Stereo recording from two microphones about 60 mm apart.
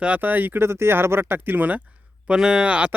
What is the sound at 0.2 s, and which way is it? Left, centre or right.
Speech, right.